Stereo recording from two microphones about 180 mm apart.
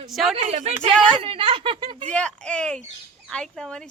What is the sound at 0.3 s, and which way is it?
Speech, 35° right (ahead or behind).